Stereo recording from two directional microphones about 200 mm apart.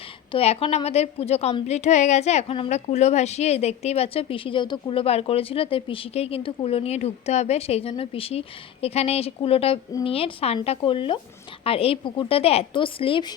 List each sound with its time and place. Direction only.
0.3 s a woman's voice: 30° left (ahead or behind)